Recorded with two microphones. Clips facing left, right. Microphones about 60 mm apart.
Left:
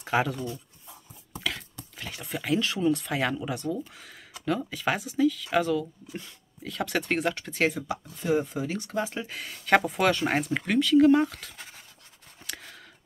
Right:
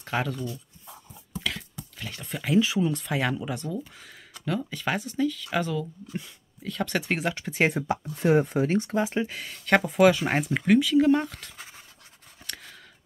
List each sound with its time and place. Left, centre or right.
0.0 s speech: centre
1.3 s a sound: centre
2.0 s speech: centre
8.2 s speech: right
9.3 s speech: centre